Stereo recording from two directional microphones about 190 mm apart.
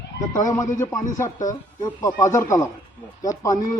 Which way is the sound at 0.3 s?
20° left (ahead or behind).